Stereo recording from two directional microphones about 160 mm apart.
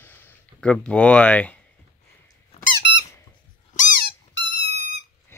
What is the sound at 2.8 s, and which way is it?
Squeak, 90° left.